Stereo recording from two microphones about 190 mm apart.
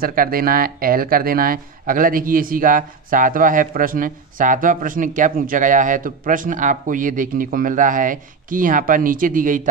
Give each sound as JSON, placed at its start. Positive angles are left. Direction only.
{"t": 0.0, "sound": "speech", "side_deg": -50}